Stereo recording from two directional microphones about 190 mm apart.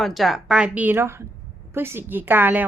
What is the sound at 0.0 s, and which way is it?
A woman's voice, centre (ahead or behind).